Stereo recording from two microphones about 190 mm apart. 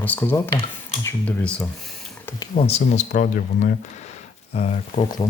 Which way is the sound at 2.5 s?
35° left (ahead or behind).